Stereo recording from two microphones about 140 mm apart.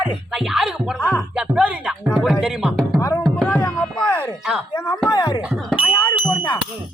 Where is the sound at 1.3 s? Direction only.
5° right (ahead or behind).